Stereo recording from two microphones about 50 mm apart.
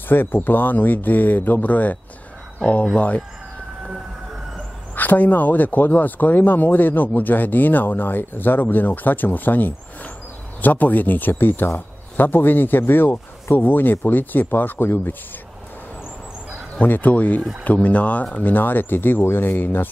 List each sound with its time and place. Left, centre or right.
0.1 s speech: left
4.9 s a man's voice: left
16.8 s a man's voice: left